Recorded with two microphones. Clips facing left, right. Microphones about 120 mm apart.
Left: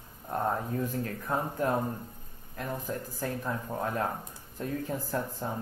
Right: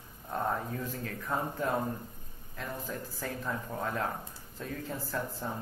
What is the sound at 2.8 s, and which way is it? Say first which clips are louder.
Speech: left 4 dB; 15° left (ahead or behind).